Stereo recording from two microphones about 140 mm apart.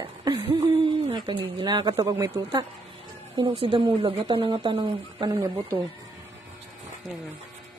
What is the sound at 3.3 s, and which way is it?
A woman's voice, 40° right (ahead or behind).